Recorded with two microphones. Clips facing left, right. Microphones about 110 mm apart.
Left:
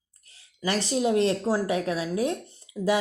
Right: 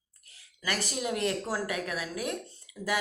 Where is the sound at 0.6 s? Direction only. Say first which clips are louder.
Left 8 dB; 25° left (ahead or behind).